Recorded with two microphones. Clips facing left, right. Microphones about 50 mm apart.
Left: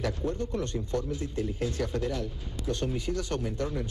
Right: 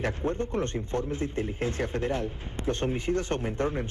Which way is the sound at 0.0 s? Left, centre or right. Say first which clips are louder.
Right 2 dB; right.